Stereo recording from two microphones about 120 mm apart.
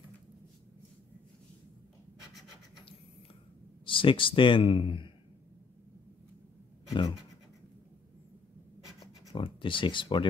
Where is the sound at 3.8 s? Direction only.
45° left (ahead or behind).